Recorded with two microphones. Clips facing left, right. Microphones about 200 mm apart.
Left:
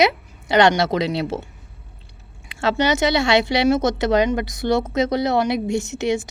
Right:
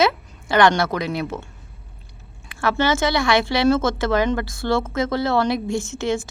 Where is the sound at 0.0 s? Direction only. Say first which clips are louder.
Left 1 dB; 20° left (ahead or behind).